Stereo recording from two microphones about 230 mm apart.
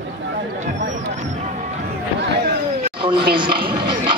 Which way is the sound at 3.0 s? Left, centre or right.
Right.